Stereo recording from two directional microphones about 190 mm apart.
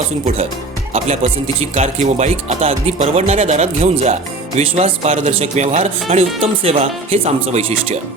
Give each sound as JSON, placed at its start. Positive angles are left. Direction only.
{"t": 0.9, "sound": "speech", "side_deg": -35}